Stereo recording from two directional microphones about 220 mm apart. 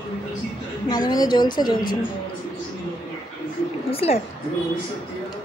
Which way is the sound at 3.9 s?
25° left (ahead or behind).